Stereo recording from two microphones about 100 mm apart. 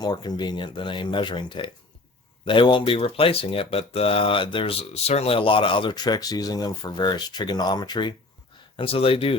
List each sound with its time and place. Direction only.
0.0 s speech: 45° left (ahead or behind)
8.7 s speech: 65° left (ahead or behind)